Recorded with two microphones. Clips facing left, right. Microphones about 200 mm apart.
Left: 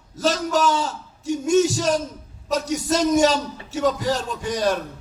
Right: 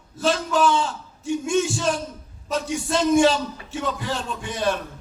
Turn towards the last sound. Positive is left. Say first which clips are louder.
# left 2 dB
turn(degrees=40)  # may be behind; listen again after turning